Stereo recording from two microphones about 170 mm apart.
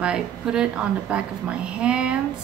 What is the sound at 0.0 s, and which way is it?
A woman's voice, 5° right (ahead or behind).